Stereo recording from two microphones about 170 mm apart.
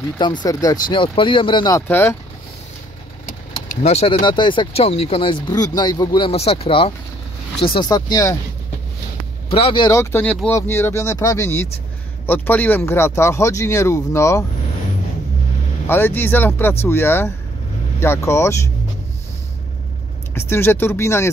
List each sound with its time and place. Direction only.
0.2 s speech: 25° left (ahead or behind)
3.5 s speech: 35° left (ahead or behind)
9.5 s speech: 30° left (ahead or behind)
9.8 s speech: 15° left (ahead or behind)
15.9 s speech: 10° left (ahead or behind)
20.3 s speech: 15° left (ahead or behind)